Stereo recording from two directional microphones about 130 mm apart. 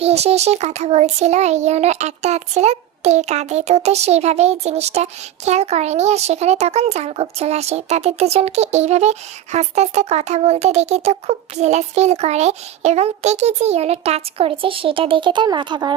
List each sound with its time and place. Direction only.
0.0 s speech: 55° right (ahead or behind); by 16.0 s 35° right (ahead or behind)